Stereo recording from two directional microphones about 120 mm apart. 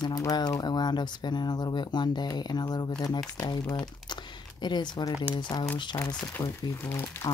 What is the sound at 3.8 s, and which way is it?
Crumpling, 40° left (ahead or behind).